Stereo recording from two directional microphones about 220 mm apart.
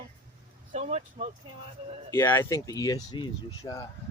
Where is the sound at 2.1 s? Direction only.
10° left (ahead or behind).